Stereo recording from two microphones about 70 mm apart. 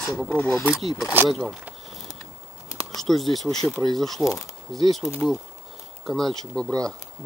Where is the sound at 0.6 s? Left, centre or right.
Centre.